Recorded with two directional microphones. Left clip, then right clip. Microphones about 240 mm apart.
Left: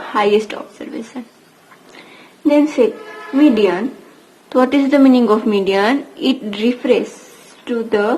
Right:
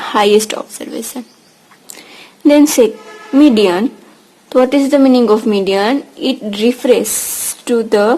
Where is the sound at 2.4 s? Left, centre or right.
Right.